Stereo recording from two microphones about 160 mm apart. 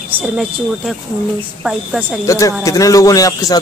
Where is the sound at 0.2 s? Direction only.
5° right (ahead or behind).